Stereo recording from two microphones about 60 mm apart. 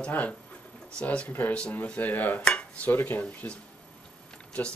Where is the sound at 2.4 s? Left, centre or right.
Centre.